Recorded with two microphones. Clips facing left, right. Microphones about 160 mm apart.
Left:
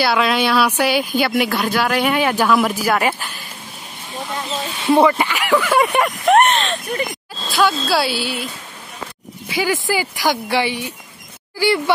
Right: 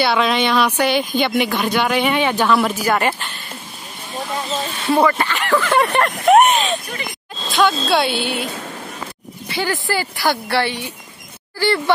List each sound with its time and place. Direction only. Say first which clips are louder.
0.0 s speech: even; 5° left (ahead or behind)
4.6 s speech: left 3 dB; 10° left (ahead or behind)
6.3 s speech: right 2 dB; 5° right (ahead or behind)
8.1 s a woman's voice: right 2 dB; 55° right (ahead or behind)
9.5 s speech: left 2 dB; 10° left (ahead or behind)